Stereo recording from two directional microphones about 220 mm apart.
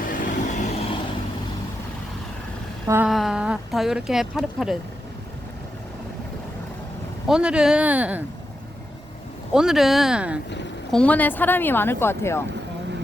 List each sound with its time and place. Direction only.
0.0 s vehicle: 35° left (ahead or behind)
2.8 s vehicle: 10° right (ahead or behind)
3.1 s speech: centre (ahead or behind)
7.3 s speech: 5° right (ahead or behind)
9.5 s speech: centre (ahead or behind)
10.9 s speech: 5° left (ahead or behind)